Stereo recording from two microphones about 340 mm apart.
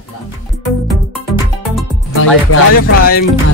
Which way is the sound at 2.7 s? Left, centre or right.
Left.